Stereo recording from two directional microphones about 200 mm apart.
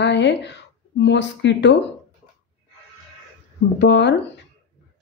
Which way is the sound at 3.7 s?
60° left (ahead or behind).